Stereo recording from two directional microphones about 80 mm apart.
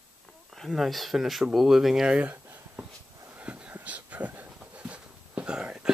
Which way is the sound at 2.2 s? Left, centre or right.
Right.